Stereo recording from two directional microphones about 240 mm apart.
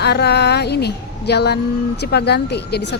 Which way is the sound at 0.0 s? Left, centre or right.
Left.